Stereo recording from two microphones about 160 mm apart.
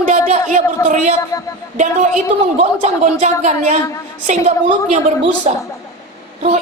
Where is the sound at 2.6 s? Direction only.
45° right (ahead or behind).